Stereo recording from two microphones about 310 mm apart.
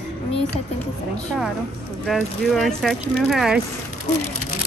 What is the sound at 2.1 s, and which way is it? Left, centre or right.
A woman's voice, centre.